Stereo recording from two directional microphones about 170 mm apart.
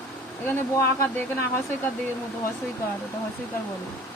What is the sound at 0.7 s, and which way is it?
Speech, 15° left (ahead or behind).